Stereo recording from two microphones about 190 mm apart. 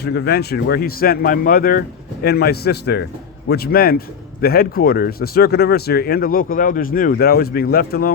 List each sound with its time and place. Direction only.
0.0 s a man's voice: 60° left (ahead or behind)